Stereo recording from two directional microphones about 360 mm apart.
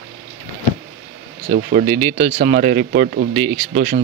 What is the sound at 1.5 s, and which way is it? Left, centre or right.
Speech, centre.